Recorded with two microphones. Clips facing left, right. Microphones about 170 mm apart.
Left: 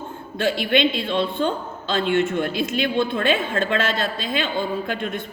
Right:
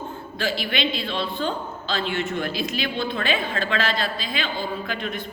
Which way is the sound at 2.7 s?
55° left (ahead or behind).